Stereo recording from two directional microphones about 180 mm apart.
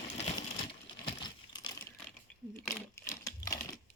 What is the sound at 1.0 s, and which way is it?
Crumpling, 25° left (ahead or behind).